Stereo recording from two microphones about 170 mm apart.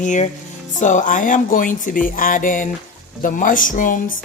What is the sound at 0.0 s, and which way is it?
Speech, 45° left (ahead or behind).